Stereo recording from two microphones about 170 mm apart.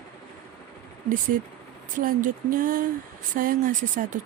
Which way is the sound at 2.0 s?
55° right (ahead or behind).